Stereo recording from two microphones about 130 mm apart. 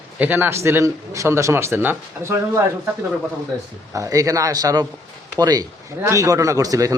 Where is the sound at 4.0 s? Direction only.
25° right (ahead or behind).